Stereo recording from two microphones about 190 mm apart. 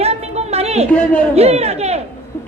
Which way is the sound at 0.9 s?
5° left (ahead or behind).